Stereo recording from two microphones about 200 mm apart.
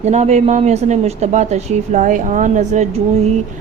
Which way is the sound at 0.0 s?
35° right (ahead or behind).